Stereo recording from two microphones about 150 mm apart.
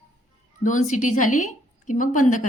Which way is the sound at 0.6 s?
55° left (ahead or behind).